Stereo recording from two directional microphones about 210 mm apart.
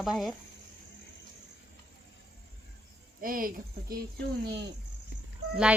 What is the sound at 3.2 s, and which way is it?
Speech, 40° right (ahead or behind).